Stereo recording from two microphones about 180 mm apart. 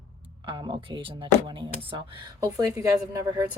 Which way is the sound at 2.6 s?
20° right (ahead or behind).